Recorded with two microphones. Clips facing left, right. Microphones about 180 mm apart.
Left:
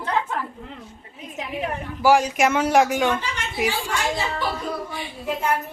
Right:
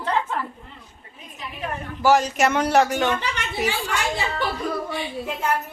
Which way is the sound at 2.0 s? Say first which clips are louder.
Left 1 dB; 10° left (ahead or behind).